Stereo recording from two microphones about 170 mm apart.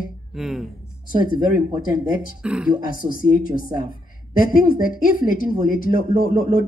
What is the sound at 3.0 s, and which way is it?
Speech, 55° left (ahead or behind).